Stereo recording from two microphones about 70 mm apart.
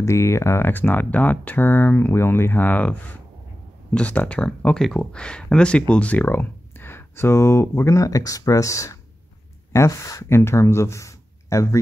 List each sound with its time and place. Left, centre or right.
0.0 s speech: left; by 4.5 s centre
4.7 s speech: centre; by 11.8 s left